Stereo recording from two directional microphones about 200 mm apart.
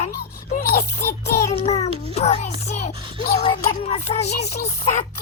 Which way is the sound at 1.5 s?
30° left (ahead or behind).